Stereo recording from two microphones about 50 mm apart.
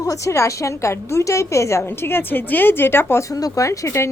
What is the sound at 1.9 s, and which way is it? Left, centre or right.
A woman's voice, left.